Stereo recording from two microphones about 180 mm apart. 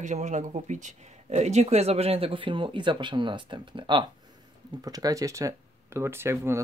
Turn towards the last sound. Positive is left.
turn(degrees=-15)  # may be behind; listen again after turning